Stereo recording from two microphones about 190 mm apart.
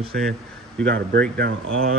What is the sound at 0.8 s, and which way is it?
Speech, 75° right (ahead or behind).